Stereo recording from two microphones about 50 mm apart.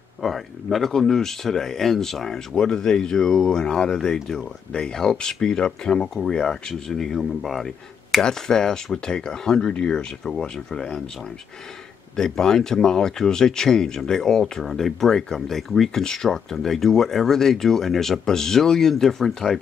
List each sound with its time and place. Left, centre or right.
0.2 s speech: centre
12.2 s speech: centre